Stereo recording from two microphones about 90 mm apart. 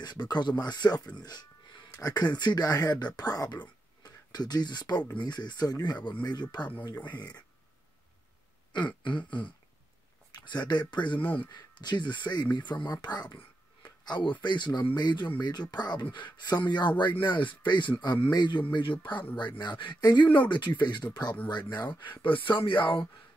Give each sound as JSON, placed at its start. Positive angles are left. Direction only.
{"t": 0.0, "sound": "speech", "side_deg": 50}
{"t": 7.0, "sound": "speech", "side_deg": 20}
{"t": 8.7, "sound": "speech", "side_deg": 60}
{"t": 22.2, "sound": "speech", "side_deg": 70}